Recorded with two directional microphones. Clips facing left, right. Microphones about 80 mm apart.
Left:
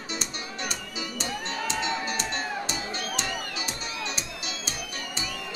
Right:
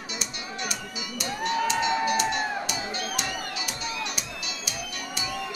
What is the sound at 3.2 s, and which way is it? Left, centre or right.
Music, left.